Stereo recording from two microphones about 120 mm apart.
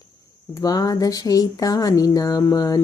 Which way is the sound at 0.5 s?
30° left (ahead or behind).